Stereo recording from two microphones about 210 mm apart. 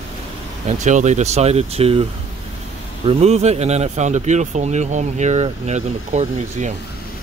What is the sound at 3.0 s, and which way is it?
Speech, 30° right (ahead or behind).